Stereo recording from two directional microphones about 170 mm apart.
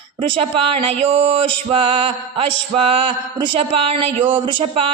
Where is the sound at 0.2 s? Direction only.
35° right (ahead or behind).